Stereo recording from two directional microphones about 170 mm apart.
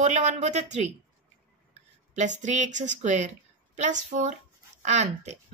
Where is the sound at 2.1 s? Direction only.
45° right (ahead or behind).